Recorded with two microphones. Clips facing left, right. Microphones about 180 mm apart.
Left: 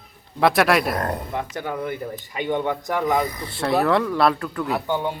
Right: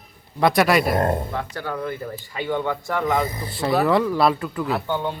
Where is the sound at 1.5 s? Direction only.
15° left (ahead or behind).